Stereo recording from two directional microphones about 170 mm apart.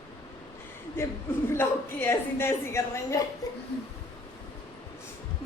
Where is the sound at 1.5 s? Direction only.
15° left (ahead or behind).